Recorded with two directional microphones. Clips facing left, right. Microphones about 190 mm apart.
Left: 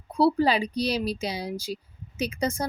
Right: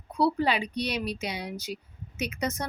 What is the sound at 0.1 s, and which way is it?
Speech, 35° left (ahead or behind).